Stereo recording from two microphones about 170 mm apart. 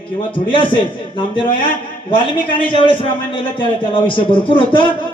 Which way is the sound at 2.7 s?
30° left (ahead or behind).